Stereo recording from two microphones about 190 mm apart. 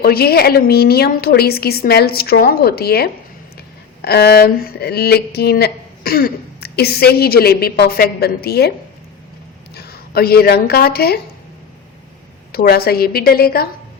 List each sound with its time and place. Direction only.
0.0 s speech: 55° left (ahead or behind)
9.7 s speech: 55° left (ahead or behind)
12.5 s a woman's voice: 55° left (ahead or behind)